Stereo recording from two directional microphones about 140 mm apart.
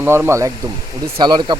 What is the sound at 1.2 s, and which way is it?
Speech, 30° right (ahead or behind).